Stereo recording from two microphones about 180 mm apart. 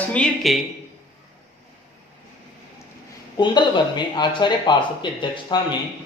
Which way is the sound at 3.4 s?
25° left (ahead or behind).